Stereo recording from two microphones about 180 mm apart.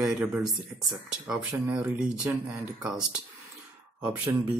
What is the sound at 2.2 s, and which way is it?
Speech, 20° right (ahead or behind).